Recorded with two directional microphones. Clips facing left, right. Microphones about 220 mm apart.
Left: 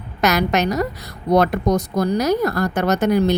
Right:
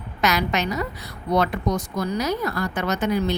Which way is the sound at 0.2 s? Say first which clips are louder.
Left 5 dB; 40° left (ahead or behind).